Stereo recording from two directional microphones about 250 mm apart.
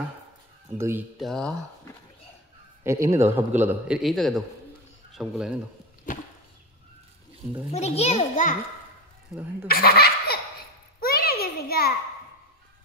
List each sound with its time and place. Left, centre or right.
0.7 s a man's voice: centre
1.2 s speech: centre
2.8 s a man's voice: centre
7.7 s a child's voice: left
9.7 s laughter: left
11.0 s a sound: left